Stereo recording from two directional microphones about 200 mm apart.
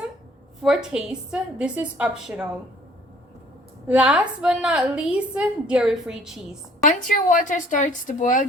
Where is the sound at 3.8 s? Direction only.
5° right (ahead or behind).